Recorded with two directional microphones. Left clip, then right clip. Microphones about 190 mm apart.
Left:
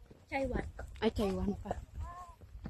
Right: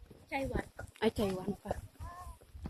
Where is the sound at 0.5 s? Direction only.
50° right (ahead or behind).